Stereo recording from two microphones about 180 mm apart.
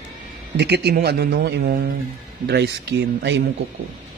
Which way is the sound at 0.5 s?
70° right (ahead or behind).